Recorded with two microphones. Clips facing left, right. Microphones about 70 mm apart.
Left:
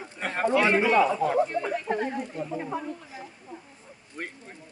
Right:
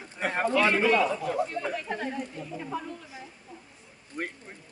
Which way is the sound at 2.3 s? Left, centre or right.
Left.